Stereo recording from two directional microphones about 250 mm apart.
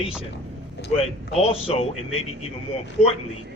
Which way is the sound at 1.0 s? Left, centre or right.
Left.